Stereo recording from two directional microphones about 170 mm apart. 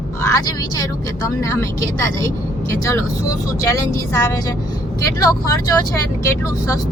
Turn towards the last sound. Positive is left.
turn(degrees=20)  # may be behind; listen again after turning